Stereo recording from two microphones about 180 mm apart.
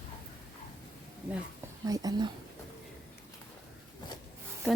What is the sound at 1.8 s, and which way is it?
Speech, 20° right (ahead or behind).